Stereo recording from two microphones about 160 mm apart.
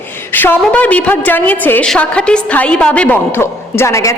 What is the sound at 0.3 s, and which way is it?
A woman's voice, 10° left (ahead or behind).